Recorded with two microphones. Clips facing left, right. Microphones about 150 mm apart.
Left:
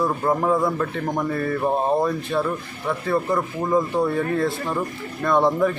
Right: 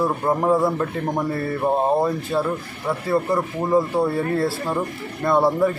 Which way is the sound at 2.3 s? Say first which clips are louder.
Right 1 dB; 10° right (ahead or behind).